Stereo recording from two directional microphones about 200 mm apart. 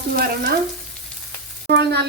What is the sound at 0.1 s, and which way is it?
Speech, 50° right (ahead or behind).